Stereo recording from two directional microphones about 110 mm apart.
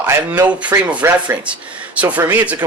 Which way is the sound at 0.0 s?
20° right (ahead or behind).